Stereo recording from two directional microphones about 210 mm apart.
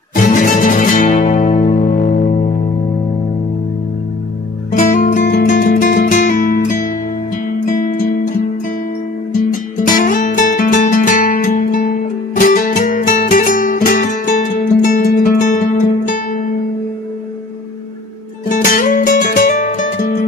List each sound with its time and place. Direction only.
0.1 s music: 40° left (ahead or behind)
4.7 s music: 40° left (ahead or behind)
9.5 s music: 40° left (ahead or behind)
18.5 s music: 40° left (ahead or behind)